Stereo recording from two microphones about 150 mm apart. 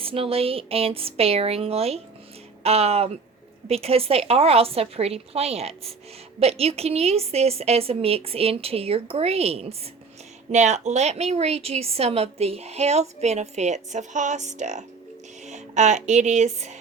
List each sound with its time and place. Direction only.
0.0 s a woman's voice: 40° right (ahead or behind)